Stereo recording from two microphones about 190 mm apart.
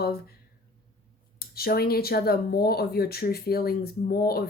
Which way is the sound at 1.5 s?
55° left (ahead or behind).